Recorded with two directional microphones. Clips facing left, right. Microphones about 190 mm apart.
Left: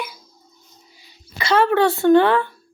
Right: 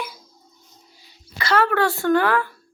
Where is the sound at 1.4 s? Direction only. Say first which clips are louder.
Left 3 dB; 25° left (ahead or behind).